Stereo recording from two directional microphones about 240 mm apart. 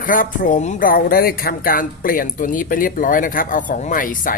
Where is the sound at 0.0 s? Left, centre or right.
Left.